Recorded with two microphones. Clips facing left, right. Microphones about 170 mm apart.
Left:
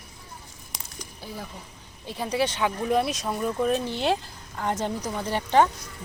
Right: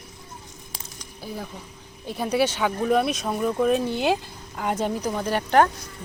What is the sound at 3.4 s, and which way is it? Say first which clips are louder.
Speech: right 4 dB; 5° right (ahead or behind).